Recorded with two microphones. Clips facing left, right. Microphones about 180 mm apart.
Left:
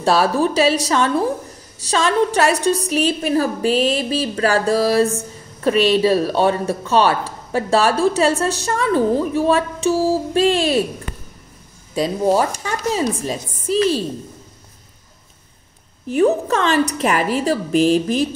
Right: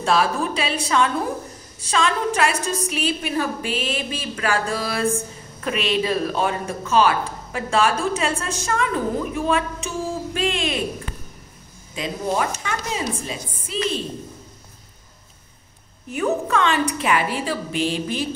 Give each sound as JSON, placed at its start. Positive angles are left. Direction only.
{"t": 0.0, "sound": "a woman's voice", "side_deg": 35}
{"t": 11.9, "sound": "a woman's voice", "side_deg": 35}
{"t": 16.2, "sound": "a woman's voice", "side_deg": 35}